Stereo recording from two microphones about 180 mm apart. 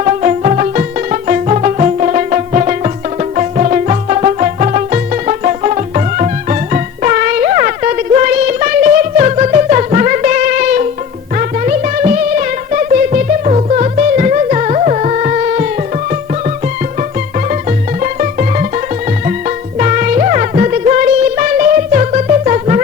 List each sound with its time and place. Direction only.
0.0 s music: 40° right (ahead or behind)
17.5 s music: 45° right (ahead or behind)
19.8 s music: 45° right (ahead or behind)